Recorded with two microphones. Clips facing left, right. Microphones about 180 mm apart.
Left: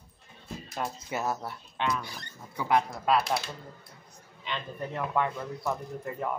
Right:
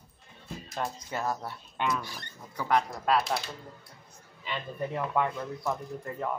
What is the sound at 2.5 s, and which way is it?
Speech, 10° left (ahead or behind).